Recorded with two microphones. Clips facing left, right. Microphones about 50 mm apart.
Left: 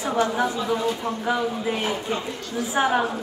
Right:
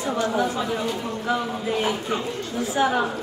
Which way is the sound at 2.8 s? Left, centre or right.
Left.